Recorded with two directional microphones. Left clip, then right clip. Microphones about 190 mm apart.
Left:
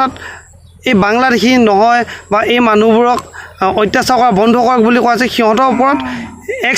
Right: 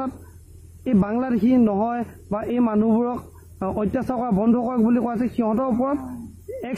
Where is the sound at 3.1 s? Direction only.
25° left (ahead or behind).